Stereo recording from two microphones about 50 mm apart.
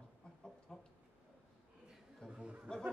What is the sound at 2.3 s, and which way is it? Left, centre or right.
Chatter, right.